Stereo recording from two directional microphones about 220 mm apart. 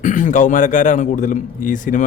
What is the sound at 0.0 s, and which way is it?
A man's voice, 35° left (ahead or behind).